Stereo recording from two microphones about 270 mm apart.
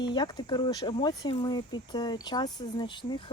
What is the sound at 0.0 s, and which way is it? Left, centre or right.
Speech, centre.